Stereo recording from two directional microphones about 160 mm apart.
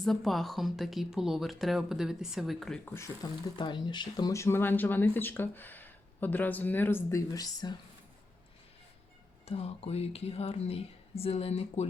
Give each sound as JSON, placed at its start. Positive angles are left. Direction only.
{"t": 0.0, "sound": "speech", "side_deg": 0}
{"t": 3.2, "sound": "speech", "side_deg": 25}
{"t": 9.5, "sound": "a woman's voice", "side_deg": 40}